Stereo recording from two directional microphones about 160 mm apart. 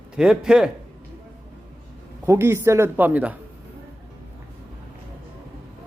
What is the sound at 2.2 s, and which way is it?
A man's voice, 15° right (ahead or behind).